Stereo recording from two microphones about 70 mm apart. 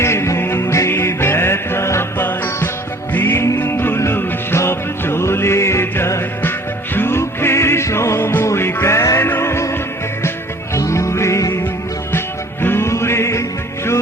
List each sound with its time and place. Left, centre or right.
0.0 s music: left
12.6 s music: left